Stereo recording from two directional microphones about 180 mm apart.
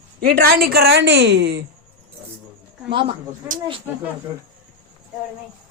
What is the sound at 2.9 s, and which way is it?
Speech, 30° right (ahead or behind).